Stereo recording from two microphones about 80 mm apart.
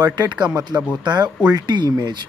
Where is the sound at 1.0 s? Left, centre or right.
Right.